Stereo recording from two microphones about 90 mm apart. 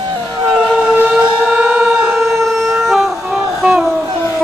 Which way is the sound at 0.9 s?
20° right (ahead or behind).